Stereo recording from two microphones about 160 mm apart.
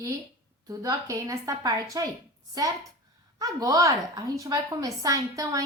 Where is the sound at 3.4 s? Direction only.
20° right (ahead or behind).